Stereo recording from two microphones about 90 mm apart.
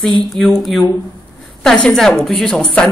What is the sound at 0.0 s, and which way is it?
A man's voice, 5° left (ahead or behind).